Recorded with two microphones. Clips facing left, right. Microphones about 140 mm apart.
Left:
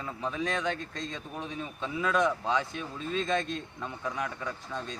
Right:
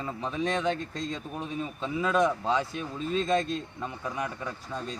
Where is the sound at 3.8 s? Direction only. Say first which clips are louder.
Left 1 dB; 5° right (ahead or behind).